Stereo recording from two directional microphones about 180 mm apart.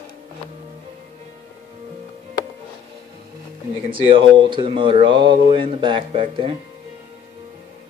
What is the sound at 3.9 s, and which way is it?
Speech, 30° right (ahead or behind).